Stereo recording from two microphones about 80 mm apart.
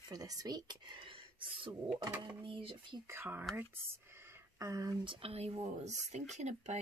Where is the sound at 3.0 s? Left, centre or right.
Right.